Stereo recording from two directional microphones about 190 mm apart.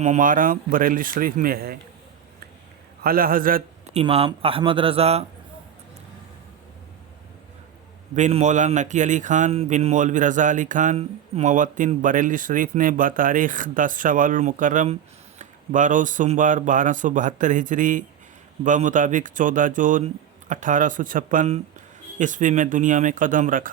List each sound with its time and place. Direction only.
0.0 s speech: 40° right (ahead or behind)
3.0 s speech: 50° right (ahead or behind)
3.9 s speech: 30° right (ahead or behind)
8.1 s speech: 40° right (ahead or behind)